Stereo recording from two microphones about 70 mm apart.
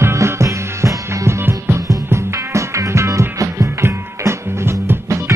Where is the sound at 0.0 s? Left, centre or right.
Right.